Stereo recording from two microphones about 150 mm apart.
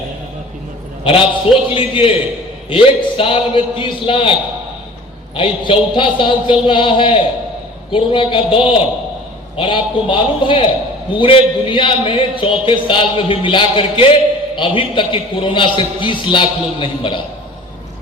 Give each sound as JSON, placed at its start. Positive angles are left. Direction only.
{"t": 1.7, "sound": "a man's voice", "side_deg": 35}